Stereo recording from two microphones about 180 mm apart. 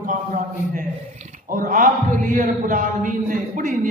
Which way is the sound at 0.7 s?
45° right (ahead or behind).